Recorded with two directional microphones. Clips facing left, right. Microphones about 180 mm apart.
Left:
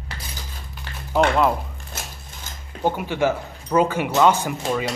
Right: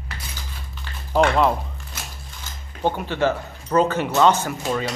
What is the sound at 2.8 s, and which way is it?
Speech, 10° left (ahead or behind).